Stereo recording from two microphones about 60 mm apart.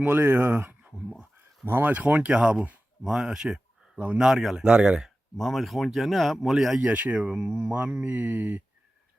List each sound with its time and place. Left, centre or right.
0.0 s speech: right
1.9 s speech: right; by 5.1 s centre
5.4 s speech: centre
6.8 s speech: right